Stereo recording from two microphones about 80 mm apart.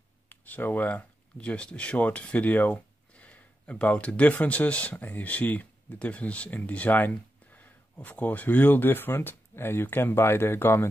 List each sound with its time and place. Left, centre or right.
0.3 s speech: left